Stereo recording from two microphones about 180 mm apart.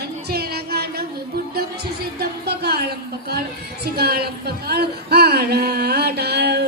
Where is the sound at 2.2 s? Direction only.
60° right (ahead or behind).